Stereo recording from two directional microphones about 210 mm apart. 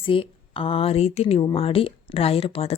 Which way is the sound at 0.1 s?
25° left (ahead or behind).